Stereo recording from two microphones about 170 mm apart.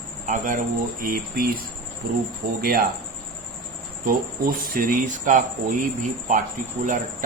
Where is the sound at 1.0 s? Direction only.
60° right (ahead or behind).